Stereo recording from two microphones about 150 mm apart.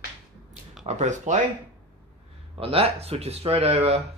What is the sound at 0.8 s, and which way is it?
Speech, 50° right (ahead or behind).